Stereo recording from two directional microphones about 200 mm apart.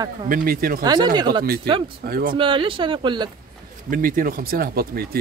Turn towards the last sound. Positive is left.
turn(degrees=-50)  # may be behind; listen again after turning